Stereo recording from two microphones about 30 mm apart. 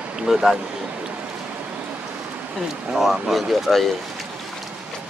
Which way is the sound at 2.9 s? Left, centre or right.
Centre.